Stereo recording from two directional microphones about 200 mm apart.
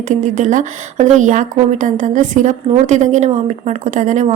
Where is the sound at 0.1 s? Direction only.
40° right (ahead or behind).